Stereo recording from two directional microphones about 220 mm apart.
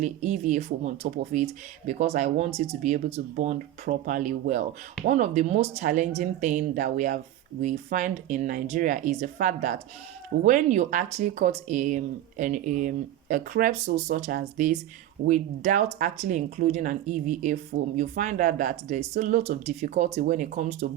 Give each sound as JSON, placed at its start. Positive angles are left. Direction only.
{"t": 0.0, "sound": "speech", "side_deg": -35}